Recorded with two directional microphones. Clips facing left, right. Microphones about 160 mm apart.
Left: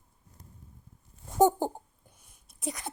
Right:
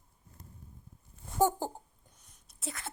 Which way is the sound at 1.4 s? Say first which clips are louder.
Left 5 dB; 15° left (ahead or behind).